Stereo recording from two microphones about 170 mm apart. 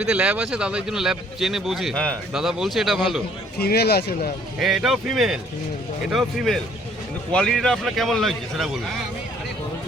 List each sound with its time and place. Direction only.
0.0 s speech: 5° right (ahead or behind)
3.6 s speech: 70° left (ahead or behind)
4.6 s speech: centre (ahead or behind)